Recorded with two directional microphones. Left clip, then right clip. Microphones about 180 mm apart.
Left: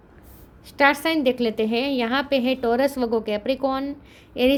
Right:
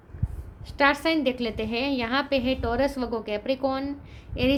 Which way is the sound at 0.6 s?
40° left (ahead or behind).